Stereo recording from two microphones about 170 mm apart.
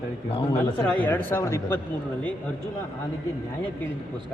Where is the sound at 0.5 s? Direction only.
10° left (ahead or behind).